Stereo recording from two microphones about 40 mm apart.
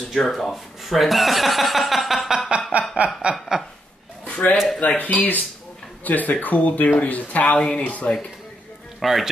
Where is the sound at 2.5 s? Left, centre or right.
Right.